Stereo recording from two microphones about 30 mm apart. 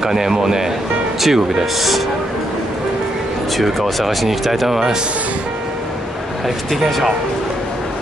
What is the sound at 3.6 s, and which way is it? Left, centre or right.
Speech, centre.